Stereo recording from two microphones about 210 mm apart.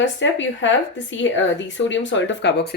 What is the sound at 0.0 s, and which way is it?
A woman's voice, 60° left (ahead or behind).